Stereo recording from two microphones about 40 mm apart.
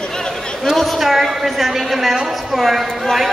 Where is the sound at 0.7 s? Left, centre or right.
Centre.